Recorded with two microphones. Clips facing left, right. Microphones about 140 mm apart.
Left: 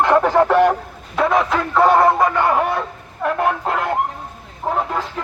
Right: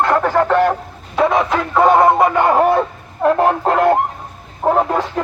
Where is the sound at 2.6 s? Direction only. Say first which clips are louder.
Right 6 dB; 45° right (ahead or behind).